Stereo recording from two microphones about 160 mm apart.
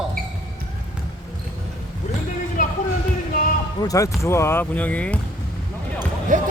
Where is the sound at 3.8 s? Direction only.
20° left (ahead or behind).